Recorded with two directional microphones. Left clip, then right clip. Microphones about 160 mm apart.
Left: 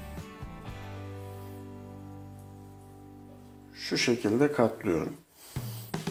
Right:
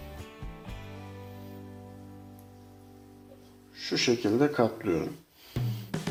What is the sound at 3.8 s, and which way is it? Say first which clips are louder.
Speech: right 1 dB; 25° left (ahead or behind).